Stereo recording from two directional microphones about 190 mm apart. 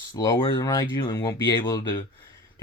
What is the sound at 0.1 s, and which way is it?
Speech, 20° left (ahead or behind).